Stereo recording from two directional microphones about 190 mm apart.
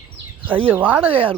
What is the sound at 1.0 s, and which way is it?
Speech, 30° right (ahead or behind).